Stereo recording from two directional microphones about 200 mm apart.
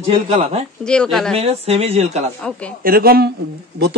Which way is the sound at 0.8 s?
5° left (ahead or behind).